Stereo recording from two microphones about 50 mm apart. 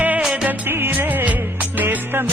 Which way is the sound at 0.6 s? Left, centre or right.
Right.